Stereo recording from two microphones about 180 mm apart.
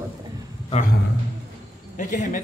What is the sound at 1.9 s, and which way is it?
Speech, 45° left (ahead or behind).